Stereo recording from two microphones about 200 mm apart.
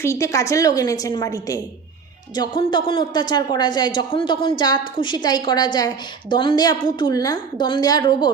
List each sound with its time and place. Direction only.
0.0 s a woman's voice: 15° left (ahead or behind)